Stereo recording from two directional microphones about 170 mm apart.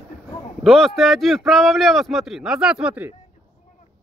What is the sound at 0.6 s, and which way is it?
Speech, centre (ahead or behind).